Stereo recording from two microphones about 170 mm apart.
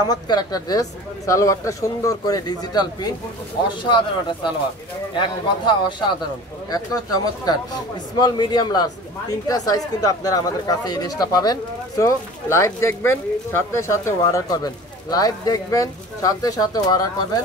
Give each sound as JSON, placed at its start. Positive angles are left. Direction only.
{"t": 0.1, "sound": "speech", "side_deg": 25}
{"t": 5.7, "sound": "speech", "side_deg": 25}